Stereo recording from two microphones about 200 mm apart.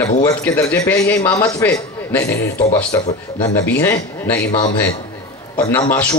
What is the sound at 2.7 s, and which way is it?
A man's voice, 15° left (ahead or behind).